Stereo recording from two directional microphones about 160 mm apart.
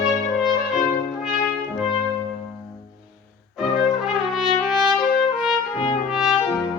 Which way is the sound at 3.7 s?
Centre (ahead or behind).